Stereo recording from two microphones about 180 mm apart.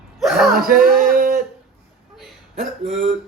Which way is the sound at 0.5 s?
55° right (ahead or behind).